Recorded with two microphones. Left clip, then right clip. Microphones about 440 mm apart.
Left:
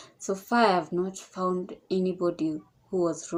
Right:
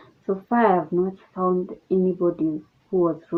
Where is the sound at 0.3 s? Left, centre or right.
Right.